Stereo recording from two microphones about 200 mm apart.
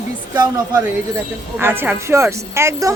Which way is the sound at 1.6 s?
10° right (ahead or behind).